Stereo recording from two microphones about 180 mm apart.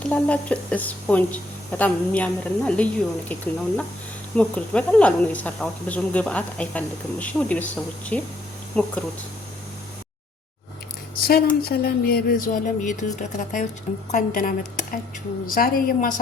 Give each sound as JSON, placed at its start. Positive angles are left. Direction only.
{"t": 0.0, "sound": "speech", "side_deg": 5}
{"t": 11.2, "sound": "speech", "side_deg": 60}